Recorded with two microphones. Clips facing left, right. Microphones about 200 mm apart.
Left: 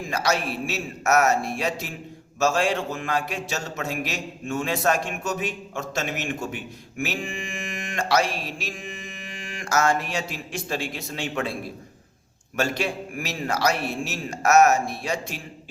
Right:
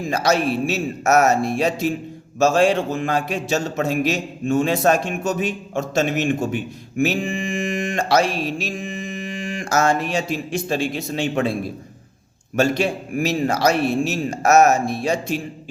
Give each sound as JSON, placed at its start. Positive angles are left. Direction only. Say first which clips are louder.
{"t": 0.1, "sound": "a man's voice", "louder": "right 6 dB", "side_deg": -25}
{"t": 7.0, "sound": "mantra", "louder": "right 9 dB", "side_deg": -30}
{"t": 12.5, "sound": "a man's voice", "louder": "right 7 dB", "side_deg": -25}